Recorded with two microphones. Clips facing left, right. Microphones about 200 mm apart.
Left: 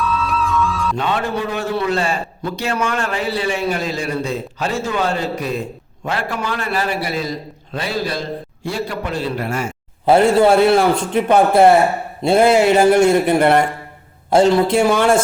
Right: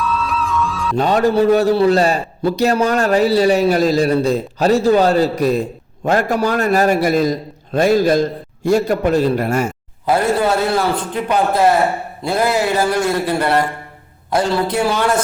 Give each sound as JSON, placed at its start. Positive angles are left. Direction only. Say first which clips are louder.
{"t": 0.0, "sound": "music", "louder": "even", "side_deg": 0}
{"t": 0.9, "sound": "a man's voice", "louder": "right 12 dB", "side_deg": -40}
{"t": 10.1, "sound": "a man's voice", "louder": "left 4 dB", "side_deg": 25}